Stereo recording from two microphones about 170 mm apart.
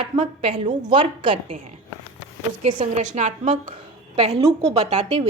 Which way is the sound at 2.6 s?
40° right (ahead or behind).